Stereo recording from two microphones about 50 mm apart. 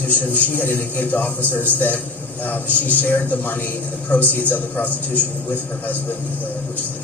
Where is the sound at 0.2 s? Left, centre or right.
Left.